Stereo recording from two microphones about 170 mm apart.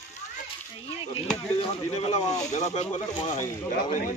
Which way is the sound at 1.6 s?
35° left (ahead or behind).